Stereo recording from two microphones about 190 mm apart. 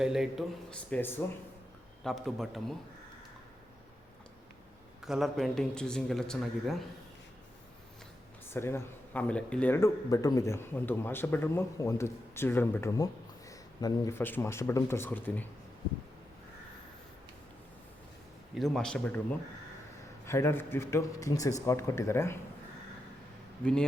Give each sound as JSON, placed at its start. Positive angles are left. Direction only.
{"t": 0.0, "sound": "speech", "side_deg": 0}
{"t": 5.0, "sound": "speech", "side_deg": 0}
{"t": 8.4, "sound": "speech", "side_deg": 10}
{"t": 18.5, "sound": "speech", "side_deg": 0}